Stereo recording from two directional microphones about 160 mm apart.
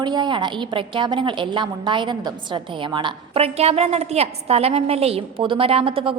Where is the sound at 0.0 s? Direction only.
30° right (ahead or behind).